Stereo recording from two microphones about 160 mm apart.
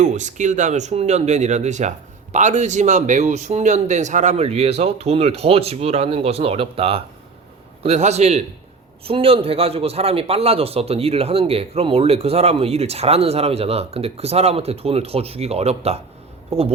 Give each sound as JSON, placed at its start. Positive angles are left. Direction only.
{"t": 0.0, "sound": "a man's voice", "side_deg": -50}